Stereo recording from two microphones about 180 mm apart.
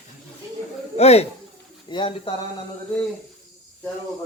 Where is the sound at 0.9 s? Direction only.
35° left (ahead or behind).